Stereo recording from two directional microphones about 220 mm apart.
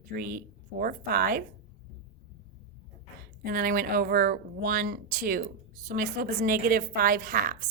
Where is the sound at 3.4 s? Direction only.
40° right (ahead or behind).